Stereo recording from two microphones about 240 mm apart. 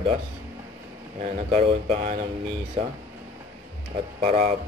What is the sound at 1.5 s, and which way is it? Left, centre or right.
Speech, right.